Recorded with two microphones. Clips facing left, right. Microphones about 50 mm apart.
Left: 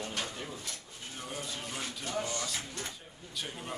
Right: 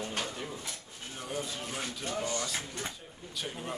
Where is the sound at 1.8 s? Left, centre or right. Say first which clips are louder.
Even; centre.